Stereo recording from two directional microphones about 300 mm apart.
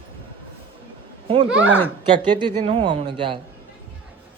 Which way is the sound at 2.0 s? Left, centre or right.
Centre.